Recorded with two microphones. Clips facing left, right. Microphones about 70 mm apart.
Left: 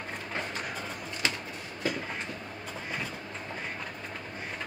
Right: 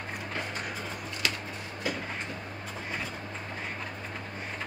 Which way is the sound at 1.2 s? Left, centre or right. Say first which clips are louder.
Left 1 dB; left.